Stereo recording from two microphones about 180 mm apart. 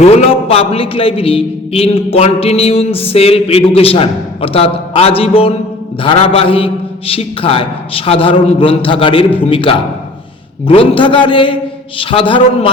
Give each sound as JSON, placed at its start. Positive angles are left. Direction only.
{"t": 0.0, "sound": "a man's voice", "side_deg": 35}